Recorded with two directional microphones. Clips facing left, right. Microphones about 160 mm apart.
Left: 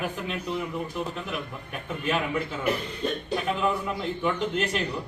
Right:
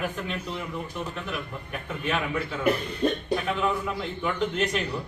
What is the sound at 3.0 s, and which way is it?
Speech, 55° right (ahead or behind).